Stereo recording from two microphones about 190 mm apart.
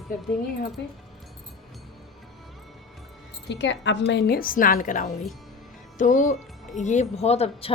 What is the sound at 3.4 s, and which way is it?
A woman's voice, 70° left (ahead or behind).